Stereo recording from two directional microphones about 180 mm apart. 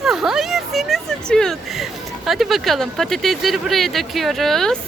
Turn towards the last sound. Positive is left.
turn(degrees=0)  # may be behind; listen again after turning